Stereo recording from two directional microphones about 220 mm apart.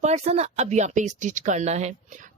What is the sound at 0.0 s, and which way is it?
A woman's voice, 30° right (ahead or behind).